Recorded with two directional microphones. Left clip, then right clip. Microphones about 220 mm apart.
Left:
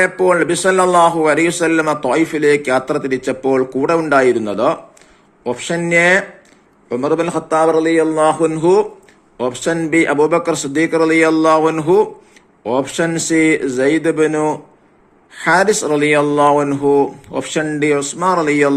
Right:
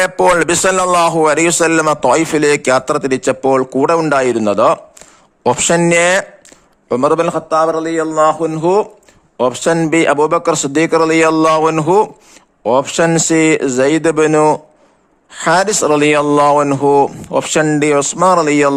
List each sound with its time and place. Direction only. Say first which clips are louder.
0.0 s a man's voice: right 2 dB; 50° right (ahead or behind)
7.4 s speech: even; 15° right (ahead or behind)
8.1 s a man's voice: right 1 dB; 30° right (ahead or behind); by 18.7 s 45° right (ahead or behind)